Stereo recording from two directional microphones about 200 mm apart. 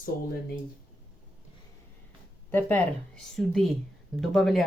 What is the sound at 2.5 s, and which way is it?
Speech, 10° left (ahead or behind).